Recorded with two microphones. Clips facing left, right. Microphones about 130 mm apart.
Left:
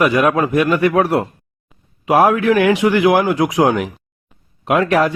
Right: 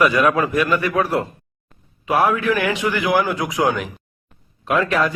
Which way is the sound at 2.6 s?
15° left (ahead or behind).